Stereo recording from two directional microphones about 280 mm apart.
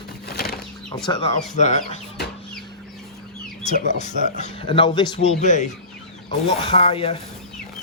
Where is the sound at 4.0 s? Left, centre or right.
Left.